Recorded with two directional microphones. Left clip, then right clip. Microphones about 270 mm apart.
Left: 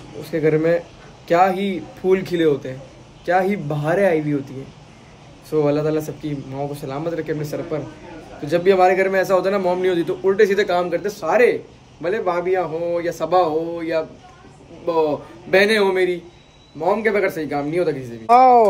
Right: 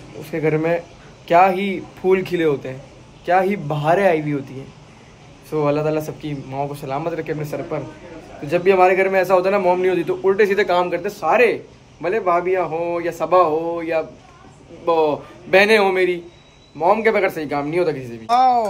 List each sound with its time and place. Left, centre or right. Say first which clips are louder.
0.2 s a man's voice: left 2 dB; centre
5.5 s a man's voice: even; centre
18.2 s speech: left 4 dB; left